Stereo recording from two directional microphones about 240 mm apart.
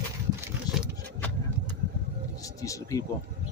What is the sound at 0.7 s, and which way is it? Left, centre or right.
Vehicle, centre.